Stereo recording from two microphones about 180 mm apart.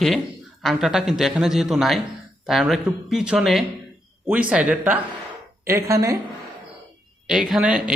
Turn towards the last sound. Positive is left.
turn(degrees=-5)  # may be behind; listen again after turning